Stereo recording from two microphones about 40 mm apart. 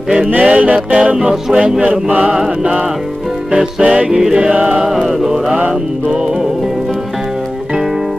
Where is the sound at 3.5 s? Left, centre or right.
Right.